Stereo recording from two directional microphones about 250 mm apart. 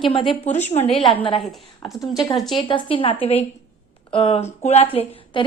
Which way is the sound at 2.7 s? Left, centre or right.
Left.